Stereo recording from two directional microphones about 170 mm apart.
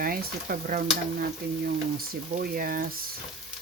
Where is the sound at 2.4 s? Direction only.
60° right (ahead or behind).